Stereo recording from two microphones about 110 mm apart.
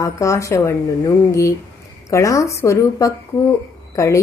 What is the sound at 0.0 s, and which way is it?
A woman's voice, 30° left (ahead or behind).